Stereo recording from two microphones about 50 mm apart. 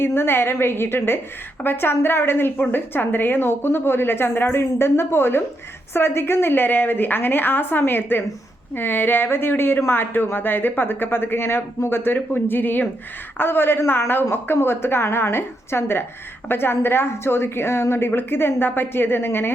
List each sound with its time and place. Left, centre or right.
0.0 s a woman's voice: left